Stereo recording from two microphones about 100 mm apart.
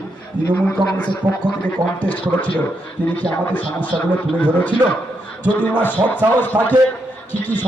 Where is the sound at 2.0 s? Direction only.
15° left (ahead or behind).